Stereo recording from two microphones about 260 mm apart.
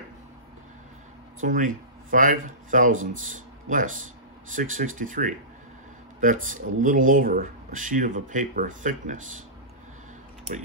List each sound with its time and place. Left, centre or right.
1.4 s speech: right